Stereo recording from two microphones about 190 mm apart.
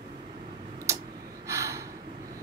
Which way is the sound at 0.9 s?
15° right (ahead or behind).